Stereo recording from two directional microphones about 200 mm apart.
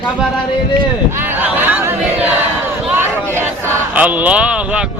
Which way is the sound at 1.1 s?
10° right (ahead or behind).